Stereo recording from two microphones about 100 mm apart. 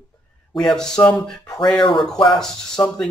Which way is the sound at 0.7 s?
5° left (ahead or behind).